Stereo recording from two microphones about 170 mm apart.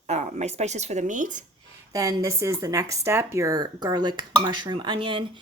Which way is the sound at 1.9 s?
20° right (ahead or behind).